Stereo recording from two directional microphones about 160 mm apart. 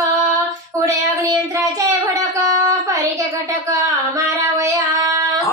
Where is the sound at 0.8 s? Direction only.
20° right (ahead or behind).